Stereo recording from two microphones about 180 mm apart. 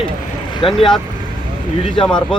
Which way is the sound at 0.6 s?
30° left (ahead or behind).